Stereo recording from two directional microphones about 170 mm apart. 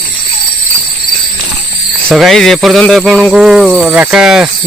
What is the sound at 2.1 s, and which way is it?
Speech, centre (ahead or behind).